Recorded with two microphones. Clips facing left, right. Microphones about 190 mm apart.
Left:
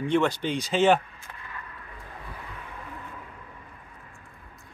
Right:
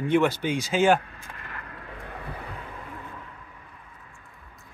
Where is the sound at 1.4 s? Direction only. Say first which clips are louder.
Right 1 dB; 65° right (ahead or behind).